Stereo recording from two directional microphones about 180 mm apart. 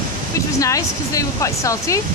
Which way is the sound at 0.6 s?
20° left (ahead or behind).